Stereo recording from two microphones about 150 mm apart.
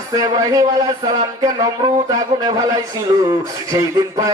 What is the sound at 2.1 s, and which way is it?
Speech, 25° right (ahead or behind).